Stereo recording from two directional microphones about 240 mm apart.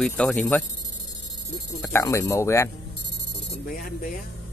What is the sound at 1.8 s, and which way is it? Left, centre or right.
Speech, centre.